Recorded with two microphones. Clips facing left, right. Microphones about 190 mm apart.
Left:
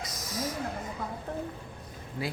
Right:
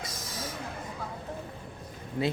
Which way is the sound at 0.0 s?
25° right (ahead or behind).